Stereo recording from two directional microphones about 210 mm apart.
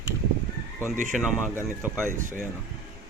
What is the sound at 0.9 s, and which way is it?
Speech, 35° right (ahead or behind).